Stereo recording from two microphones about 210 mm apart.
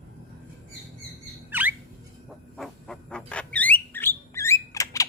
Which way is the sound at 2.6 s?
5° left (ahead or behind).